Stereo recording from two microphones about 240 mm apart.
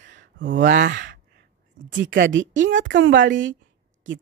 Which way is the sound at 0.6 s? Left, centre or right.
Right.